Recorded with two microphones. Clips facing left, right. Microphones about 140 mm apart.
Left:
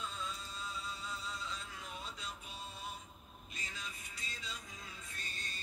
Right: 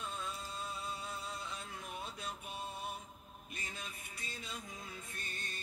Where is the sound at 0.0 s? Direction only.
55° right (ahead or behind).